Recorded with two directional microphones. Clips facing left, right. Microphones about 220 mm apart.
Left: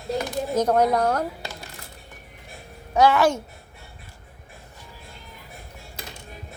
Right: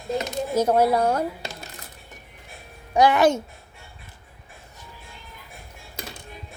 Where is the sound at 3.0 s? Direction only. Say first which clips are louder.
Right 1 dB; 15° right (ahead or behind).